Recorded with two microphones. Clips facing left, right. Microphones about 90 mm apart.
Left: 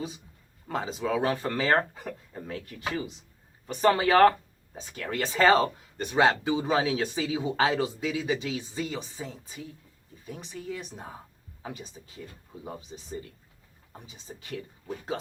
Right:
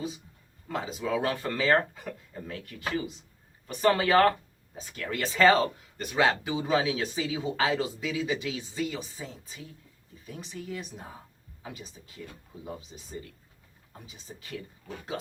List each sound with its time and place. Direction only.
0.7 s speech: 30° left (ahead or behind)